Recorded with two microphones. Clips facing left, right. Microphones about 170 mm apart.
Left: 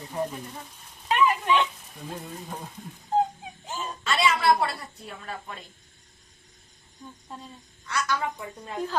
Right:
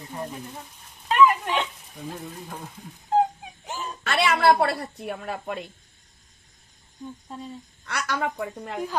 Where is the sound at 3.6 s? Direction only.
65° right (ahead or behind).